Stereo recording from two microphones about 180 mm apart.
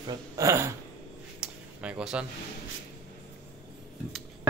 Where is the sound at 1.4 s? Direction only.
5° right (ahead or behind).